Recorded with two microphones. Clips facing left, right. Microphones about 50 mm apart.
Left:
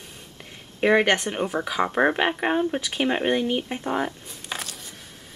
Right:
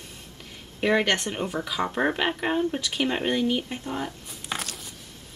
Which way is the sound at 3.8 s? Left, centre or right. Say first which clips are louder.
Left 5 dB; left.